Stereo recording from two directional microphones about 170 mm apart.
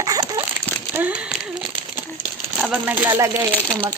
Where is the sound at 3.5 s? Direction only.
10° left (ahead or behind).